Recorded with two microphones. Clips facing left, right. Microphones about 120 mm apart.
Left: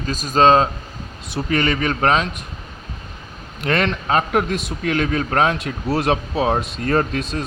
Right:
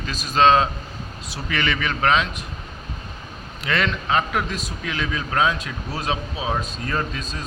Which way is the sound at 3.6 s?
50° left (ahead or behind).